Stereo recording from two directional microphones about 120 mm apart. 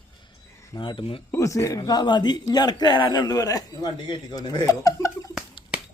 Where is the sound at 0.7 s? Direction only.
45° left (ahead or behind).